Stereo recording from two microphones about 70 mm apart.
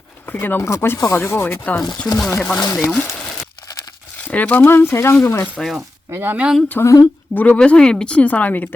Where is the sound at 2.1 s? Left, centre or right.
Centre.